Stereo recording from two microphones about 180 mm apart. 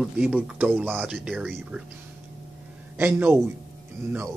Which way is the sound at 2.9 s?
10° right (ahead or behind).